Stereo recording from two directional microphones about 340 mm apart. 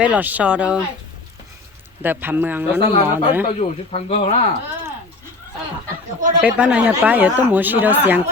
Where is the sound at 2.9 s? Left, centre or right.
Centre.